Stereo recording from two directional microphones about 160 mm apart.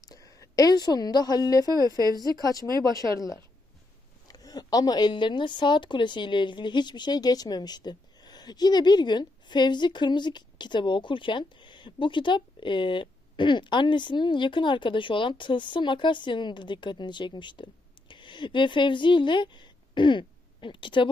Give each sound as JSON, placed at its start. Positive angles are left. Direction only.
{"t": 0.1, "sound": "a woman's voice", "side_deg": 20}
{"t": 2.0, "sound": "speech", "side_deg": -25}
{"t": 2.4, "sound": "speech", "side_deg": 25}